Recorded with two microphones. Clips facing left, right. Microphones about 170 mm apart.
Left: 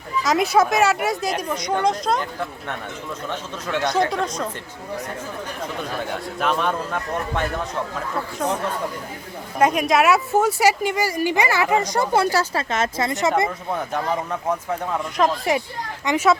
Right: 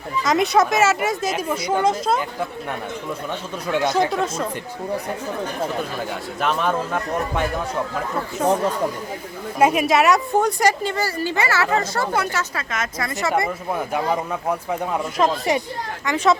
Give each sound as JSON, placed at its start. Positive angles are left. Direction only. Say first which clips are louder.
{"t": 0.2, "sound": "speech", "louder": "even", "side_deg": 0}
{"t": 6.0, "sound": "speech", "louder": "even", "side_deg": 0}
{"t": 9.6, "sound": "speech", "louder": "right 1 dB", "side_deg": -5}
{"t": 12.1, "sound": "speech", "louder": "left 4 dB", "side_deg": 30}
{"t": 15.2, "sound": "speech", "louder": "even", "side_deg": 0}